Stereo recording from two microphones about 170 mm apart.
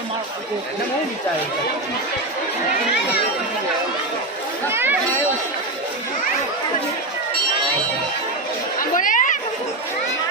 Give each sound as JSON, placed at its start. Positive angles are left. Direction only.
{"t": 4.7, "sound": "chatter", "side_deg": -15}
{"t": 8.8, "sound": "chatter", "side_deg": 50}